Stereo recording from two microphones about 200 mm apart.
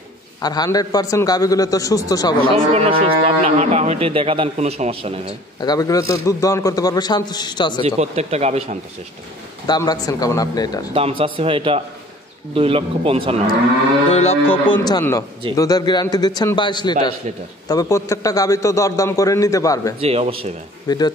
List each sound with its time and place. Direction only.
0.4 s a man's voice: 20° left (ahead or behind)
2.5 s speech: 30° right (ahead or behind)
5.6 s a man's voice: 20° left (ahead or behind)
7.8 s speech: 30° right (ahead or behind)
9.7 s a man's voice: 20° left (ahead or behind)
10.9 s a man's voice: 25° right (ahead or behind)
14.1 s speech: 30° left (ahead or behind)
14.7 s a man's voice: 20° left (ahead or behind)
20.0 s a man's voice: 30° right (ahead or behind)
20.9 s a man's voice: 20° left (ahead or behind)